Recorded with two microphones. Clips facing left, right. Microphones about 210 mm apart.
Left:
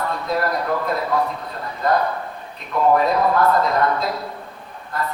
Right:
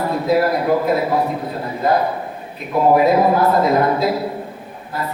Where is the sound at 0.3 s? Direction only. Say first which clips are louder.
Right 7 dB; 5° right (ahead or behind).